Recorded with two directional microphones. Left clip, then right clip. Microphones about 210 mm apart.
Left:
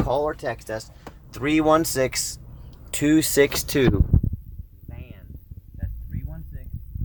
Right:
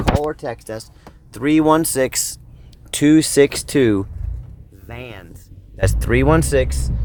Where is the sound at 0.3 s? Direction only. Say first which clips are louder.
Right 2 dB; 45° right (ahead or behind).